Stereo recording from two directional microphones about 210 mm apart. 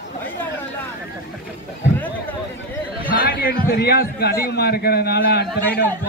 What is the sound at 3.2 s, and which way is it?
A man's voice, 45° left (ahead or behind).